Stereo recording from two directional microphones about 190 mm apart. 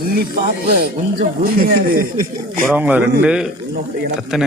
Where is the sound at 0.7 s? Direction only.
55° right (ahead or behind).